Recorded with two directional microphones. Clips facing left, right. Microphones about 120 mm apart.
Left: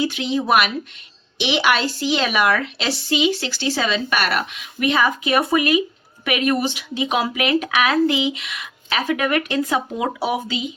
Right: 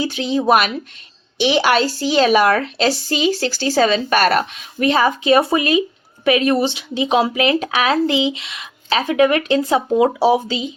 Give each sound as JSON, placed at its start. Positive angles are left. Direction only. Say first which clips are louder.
{"t": 0.0, "sound": "speech", "louder": "right 3 dB", "side_deg": -35}